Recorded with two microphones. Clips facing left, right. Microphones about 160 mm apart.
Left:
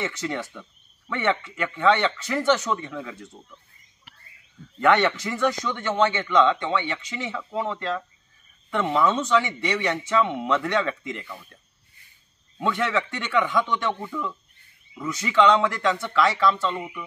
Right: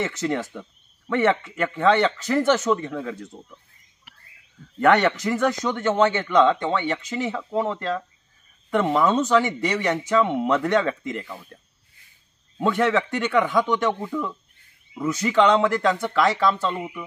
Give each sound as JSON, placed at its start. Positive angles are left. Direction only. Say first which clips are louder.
{"t": 0.0, "sound": "speech", "louder": "right 4 dB", "side_deg": -45}
{"t": 4.7, "sound": "speech", "louder": "right 2 dB", "side_deg": -45}
{"t": 12.6, "sound": "speech", "louder": "right 4 dB", "side_deg": -45}
{"t": 15.0, "sound": "speech", "louder": "right 2 dB", "side_deg": -45}